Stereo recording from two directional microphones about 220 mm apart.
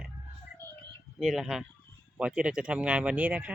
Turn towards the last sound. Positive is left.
turn(degrees=-5)  # may be behind; listen again after turning